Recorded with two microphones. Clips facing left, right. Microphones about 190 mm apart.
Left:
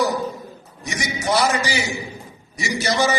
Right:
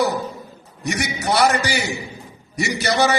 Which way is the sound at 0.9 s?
65° right (ahead or behind).